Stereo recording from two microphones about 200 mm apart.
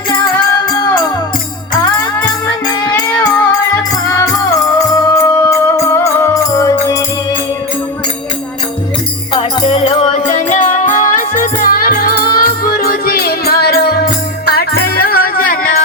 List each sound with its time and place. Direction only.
4.1 s music: 15° left (ahead or behind)
9.3 s music: 25° left (ahead or behind); by 15.8 s 45° left (ahead or behind)